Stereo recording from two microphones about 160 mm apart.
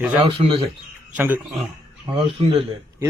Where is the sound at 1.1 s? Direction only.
10° right (ahead or behind).